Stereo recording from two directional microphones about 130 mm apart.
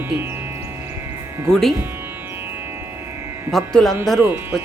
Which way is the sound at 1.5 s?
Centre (ahead or behind).